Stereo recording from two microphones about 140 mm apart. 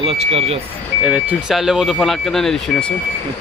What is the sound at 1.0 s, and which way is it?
Speech, 10° right (ahead or behind).